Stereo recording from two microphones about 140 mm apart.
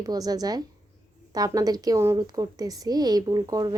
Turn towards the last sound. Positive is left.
turn(degrees=-30)  # may be behind; listen again after turning